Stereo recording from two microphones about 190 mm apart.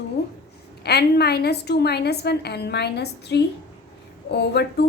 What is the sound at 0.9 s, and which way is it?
A woman's voice, 60° left (ahead or behind).